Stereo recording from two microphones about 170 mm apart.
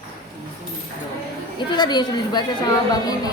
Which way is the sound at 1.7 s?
25° left (ahead or behind).